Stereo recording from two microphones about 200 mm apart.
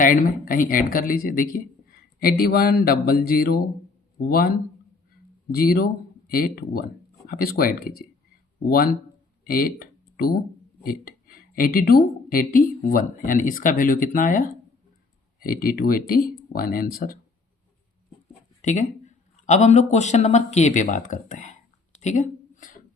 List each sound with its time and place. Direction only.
0.0 s a woman's voice: 45° left (ahead or behind)
5.5 s a woman's voice: 50° left (ahead or behind)
9.4 s a sound: 45° left (ahead or behind)
10.8 s a woman's voice: 45° left (ahead or behind)
18.6 s a man's voice: 35° left (ahead or behind)
22.0 s a sound: 40° left (ahead or behind)